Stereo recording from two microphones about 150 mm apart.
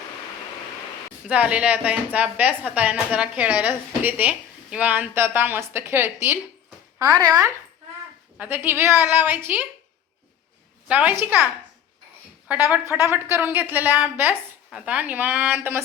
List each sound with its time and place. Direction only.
1.3 s a woman's voice: 10° right (ahead or behind)
7.2 s speech: 25° right (ahead or behind)
8.4 s a woman's voice: 10° right (ahead or behind)
10.8 s a woman's voice: 10° right (ahead or behind)
12.7 s a woman's voice: 15° right (ahead or behind)